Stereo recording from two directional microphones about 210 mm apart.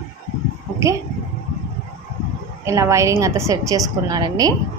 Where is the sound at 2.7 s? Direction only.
15° right (ahead or behind).